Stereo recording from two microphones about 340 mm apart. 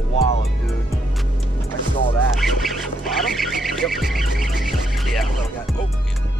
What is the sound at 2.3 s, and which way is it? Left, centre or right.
Goose, centre.